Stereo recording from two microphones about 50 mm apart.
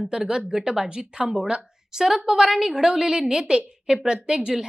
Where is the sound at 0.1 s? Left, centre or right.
Centre.